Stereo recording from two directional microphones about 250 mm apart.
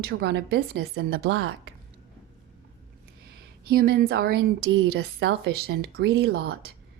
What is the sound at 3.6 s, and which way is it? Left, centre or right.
A woman's voice, right.